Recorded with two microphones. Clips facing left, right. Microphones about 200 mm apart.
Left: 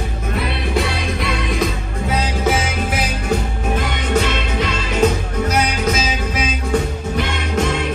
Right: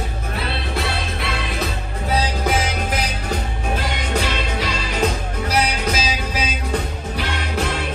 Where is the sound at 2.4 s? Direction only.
10° left (ahead or behind).